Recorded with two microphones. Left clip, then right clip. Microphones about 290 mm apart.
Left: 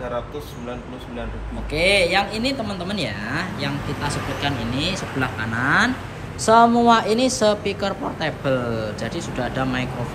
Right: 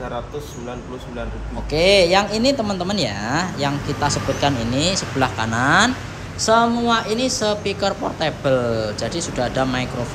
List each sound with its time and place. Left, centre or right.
1.7 s a woman's voice: centre